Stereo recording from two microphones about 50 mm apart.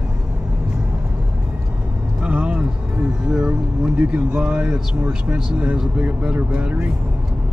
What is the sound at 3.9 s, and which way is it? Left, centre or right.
Speech, right.